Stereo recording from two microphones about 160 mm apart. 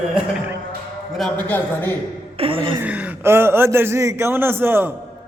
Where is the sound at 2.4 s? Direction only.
35° right (ahead or behind).